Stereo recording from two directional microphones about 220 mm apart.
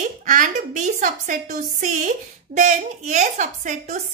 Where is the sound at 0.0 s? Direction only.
35° right (ahead or behind).